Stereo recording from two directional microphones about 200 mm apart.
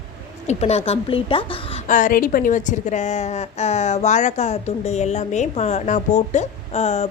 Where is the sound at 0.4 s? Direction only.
30° left (ahead or behind).